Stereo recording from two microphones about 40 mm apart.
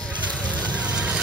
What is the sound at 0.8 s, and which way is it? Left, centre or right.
Vehicle, right.